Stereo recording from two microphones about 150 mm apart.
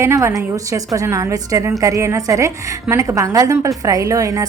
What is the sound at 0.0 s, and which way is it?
A woman's voice, 15° right (ahead or behind).